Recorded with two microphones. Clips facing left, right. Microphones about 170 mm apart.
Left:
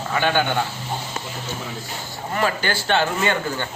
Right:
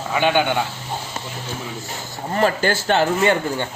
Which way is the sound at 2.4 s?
40° right (ahead or behind).